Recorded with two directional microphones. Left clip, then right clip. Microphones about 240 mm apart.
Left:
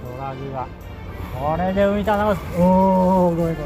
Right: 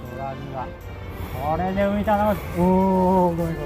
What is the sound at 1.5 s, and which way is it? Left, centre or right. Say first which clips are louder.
Speech: left 4 dB; left.